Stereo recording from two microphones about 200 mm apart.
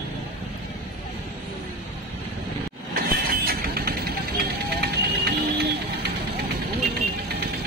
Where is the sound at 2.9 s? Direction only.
50° right (ahead or behind).